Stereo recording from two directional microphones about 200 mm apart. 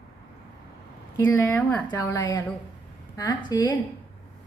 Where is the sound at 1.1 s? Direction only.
15° left (ahead or behind).